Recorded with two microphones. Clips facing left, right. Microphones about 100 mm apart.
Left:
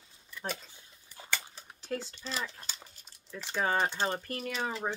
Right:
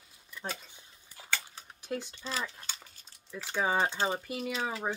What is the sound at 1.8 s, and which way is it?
Speech, 15° right (ahead or behind).